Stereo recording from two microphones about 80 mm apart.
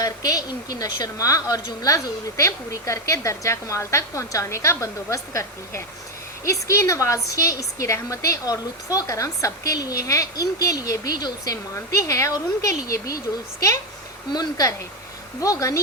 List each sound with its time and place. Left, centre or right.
0.0 s a woman's voice: left
14.3 s a woman's voice: left